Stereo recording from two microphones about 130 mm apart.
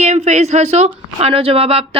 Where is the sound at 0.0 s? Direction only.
60° right (ahead or behind).